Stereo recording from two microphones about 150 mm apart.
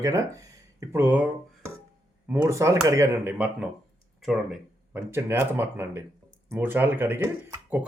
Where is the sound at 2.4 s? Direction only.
20° right (ahead or behind); by 4.5 s centre (ahead or behind).